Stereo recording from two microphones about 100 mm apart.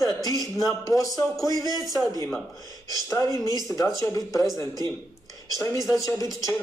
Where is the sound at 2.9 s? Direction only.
35° left (ahead or behind).